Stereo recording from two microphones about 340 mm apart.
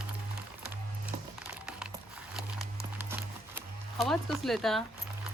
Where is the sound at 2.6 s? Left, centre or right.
Centre.